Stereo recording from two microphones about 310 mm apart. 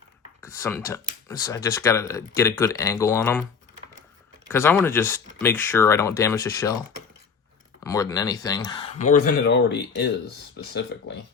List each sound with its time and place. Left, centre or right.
0.4 s speech: centre
4.4 s speech: centre
7.9 s speech: centre; by 10.1 s left